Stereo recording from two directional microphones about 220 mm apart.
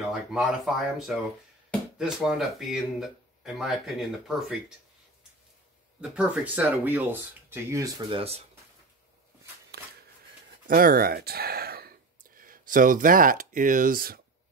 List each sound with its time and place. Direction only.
0.1 s speech: centre (ahead or behind)
5.9 s speech: 5° right (ahead or behind)
8.2 s speech: 25° right (ahead or behind)
9.7 s shuffling cards: 45° right (ahead or behind)
10.7 s speech: 40° right (ahead or behind)